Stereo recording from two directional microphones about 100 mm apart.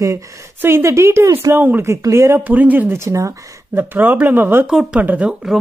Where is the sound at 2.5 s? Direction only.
15° right (ahead or behind); by 3.4 s 30° right (ahead or behind).